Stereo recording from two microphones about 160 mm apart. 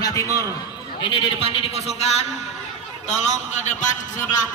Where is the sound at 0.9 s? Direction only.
35° left (ahead or behind).